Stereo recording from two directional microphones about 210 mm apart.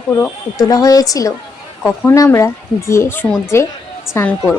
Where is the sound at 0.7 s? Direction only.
15° left (ahead or behind).